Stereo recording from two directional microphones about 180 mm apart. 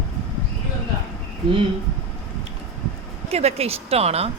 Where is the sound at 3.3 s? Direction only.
35° right (ahead or behind).